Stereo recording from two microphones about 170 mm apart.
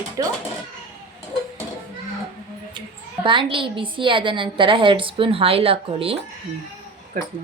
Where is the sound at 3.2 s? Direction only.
30° right (ahead or behind).